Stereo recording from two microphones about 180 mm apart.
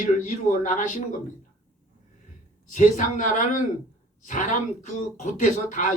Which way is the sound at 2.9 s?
45° left (ahead or behind).